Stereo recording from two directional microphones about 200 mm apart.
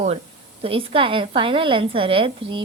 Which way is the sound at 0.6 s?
30° right (ahead or behind).